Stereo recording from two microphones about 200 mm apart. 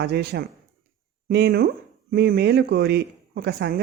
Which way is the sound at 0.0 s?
55° right (ahead or behind).